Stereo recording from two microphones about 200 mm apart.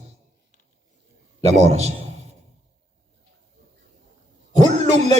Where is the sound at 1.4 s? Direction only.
35° right (ahead or behind).